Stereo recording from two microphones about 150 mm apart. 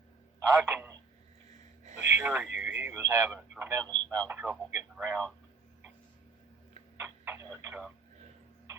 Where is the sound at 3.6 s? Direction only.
20° right (ahead or behind).